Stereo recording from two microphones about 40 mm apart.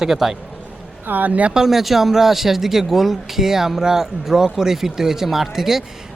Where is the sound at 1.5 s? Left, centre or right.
Centre.